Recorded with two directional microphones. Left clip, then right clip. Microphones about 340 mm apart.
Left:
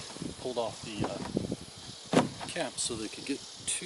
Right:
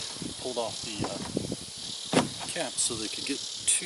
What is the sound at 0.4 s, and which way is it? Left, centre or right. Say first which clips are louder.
Speech: right 1 dB; left.